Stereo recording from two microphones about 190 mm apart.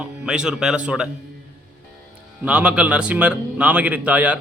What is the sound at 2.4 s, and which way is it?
Speech, 5° right (ahead or behind).